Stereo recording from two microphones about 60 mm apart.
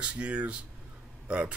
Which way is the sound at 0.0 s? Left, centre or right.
Right.